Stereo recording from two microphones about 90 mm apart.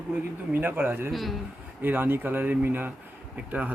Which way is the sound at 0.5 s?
20° right (ahead or behind).